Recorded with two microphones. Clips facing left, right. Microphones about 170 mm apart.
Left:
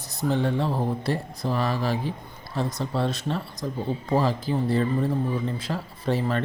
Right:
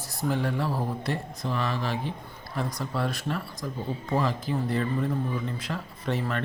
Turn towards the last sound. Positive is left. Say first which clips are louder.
# left 4 dB
turn(degrees=30)  # may be behind; listen again after turning